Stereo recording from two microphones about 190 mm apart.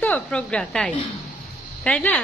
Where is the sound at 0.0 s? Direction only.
10° left (ahead or behind).